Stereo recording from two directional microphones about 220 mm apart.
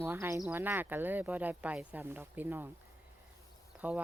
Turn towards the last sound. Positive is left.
turn(degrees=-5)  # may be behind; listen again after turning